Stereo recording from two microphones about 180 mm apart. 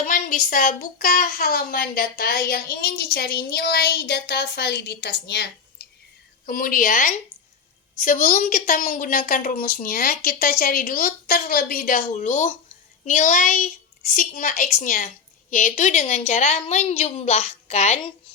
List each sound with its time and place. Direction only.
0.0 s speech: 50° left (ahead or behind); by 5.5 s 65° left (ahead or behind)
6.4 s a woman's voice: 50° left (ahead or behind)